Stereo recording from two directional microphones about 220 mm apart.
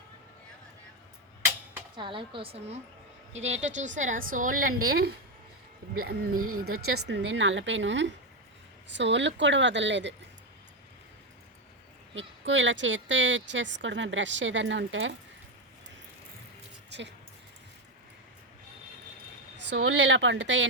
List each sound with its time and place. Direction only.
2.0 s a woman's voice: 20° right (ahead or behind); by 6.4 s 40° right (ahead or behind)
6.7 s speech: 75° right (ahead or behind)
7.1 s a woman's voice: 55° right (ahead or behind)
12.1 s a woman's voice: 60° right (ahead or behind)
16.9 s speech: 50° right (ahead or behind)
19.5 s a woman's voice: 60° right (ahead or behind)